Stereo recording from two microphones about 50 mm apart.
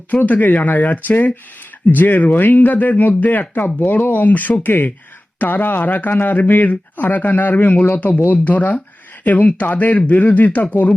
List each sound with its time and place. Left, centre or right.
0.1 s speech: left